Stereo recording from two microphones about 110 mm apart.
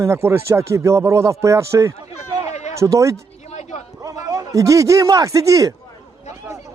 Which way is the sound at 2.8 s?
30° right (ahead or behind).